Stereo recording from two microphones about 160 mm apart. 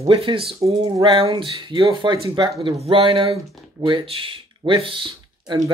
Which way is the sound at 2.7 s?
35° right (ahead or behind).